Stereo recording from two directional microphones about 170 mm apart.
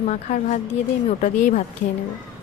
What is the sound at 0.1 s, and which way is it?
A woman's voice, 45° left (ahead or behind).